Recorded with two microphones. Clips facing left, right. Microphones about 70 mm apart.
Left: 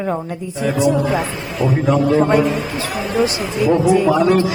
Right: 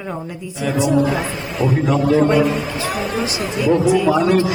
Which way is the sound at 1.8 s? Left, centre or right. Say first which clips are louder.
Left 2 dB; centre.